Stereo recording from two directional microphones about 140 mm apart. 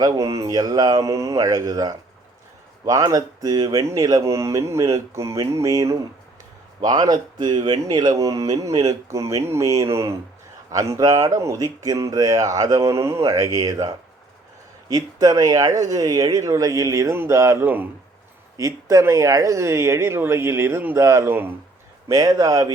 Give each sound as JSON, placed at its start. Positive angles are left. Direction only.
{"t": 0.0, "sound": "speech", "side_deg": -25}